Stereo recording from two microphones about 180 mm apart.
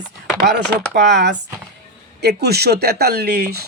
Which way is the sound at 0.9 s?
70° right (ahead or behind).